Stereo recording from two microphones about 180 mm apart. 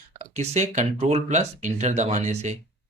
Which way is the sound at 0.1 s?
40° right (ahead or behind).